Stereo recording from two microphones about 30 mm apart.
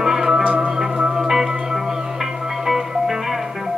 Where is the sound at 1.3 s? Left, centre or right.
Centre.